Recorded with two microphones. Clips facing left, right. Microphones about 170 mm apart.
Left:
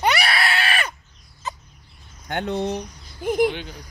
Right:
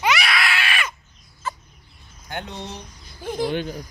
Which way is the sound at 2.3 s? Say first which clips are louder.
Left 8 dB; 60° left (ahead or behind).